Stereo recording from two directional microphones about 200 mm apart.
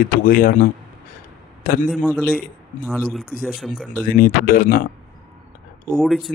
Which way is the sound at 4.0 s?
45° left (ahead or behind).